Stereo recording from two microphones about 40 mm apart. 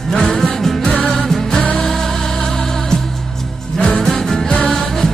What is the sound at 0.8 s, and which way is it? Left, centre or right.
Music, left.